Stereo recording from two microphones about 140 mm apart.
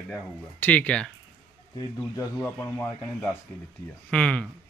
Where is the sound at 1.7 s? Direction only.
25° left (ahead or behind).